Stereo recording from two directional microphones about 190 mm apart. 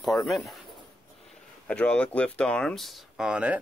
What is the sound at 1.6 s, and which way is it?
Speech, 5° left (ahead or behind).